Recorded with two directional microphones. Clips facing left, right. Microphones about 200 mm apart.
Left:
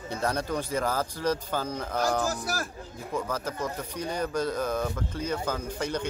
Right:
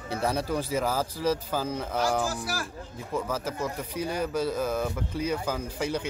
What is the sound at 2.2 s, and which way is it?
Speech, 45° left (ahead or behind).